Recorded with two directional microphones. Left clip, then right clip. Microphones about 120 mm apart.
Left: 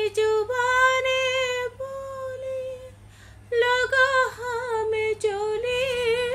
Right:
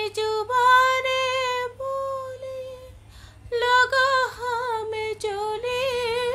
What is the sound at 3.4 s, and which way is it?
Female singing, 30° right (ahead or behind).